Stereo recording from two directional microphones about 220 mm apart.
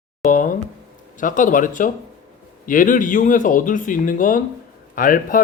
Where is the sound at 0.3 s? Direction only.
35° left (ahead or behind).